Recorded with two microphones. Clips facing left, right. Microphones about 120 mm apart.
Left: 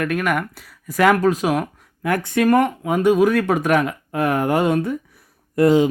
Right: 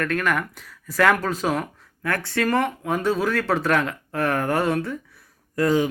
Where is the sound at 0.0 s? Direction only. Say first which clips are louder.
Left 3 dB; 10° left (ahead or behind).